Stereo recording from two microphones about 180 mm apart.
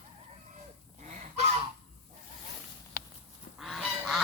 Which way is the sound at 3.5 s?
Centre (ahead or behind).